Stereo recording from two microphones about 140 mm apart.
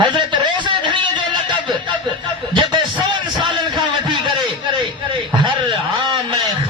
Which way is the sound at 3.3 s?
Centre (ahead or behind).